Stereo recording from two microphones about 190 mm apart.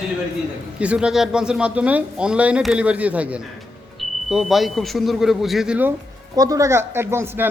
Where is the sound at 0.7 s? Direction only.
5° right (ahead or behind).